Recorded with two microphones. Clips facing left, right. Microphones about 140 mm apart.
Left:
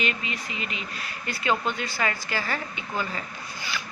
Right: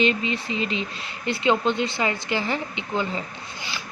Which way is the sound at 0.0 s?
30° right (ahead or behind).